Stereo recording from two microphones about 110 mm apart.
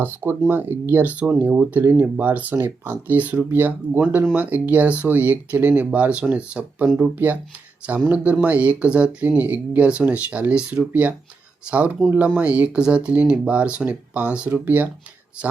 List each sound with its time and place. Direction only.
0.0 s speech: 20° right (ahead or behind)